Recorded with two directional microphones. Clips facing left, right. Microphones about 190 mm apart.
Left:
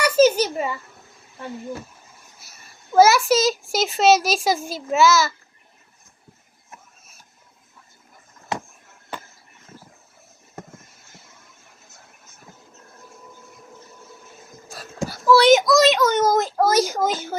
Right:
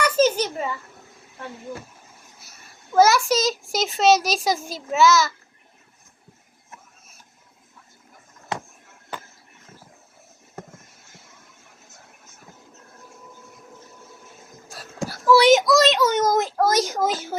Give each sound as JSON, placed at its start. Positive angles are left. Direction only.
{"t": 0.0, "sound": "a sound", "side_deg": 10}
{"t": 2.9, "sound": "a child's voice", "side_deg": 5}
{"t": 15.3, "sound": "a child's voice", "side_deg": -15}
{"t": 15.5, "sound": "a child's voice", "side_deg": 0}
{"t": 16.2, "sound": "a child's voice", "side_deg": 5}